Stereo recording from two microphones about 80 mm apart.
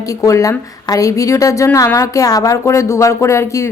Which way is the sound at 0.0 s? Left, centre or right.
Left.